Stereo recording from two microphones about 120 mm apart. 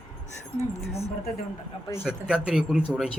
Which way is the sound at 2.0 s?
5° right (ahead or behind).